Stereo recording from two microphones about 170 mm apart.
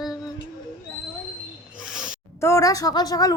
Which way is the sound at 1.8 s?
5° right (ahead or behind).